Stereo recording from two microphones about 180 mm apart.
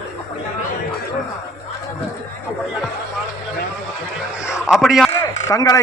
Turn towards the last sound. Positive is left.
turn(degrees=20)  # may be behind; listen again after turning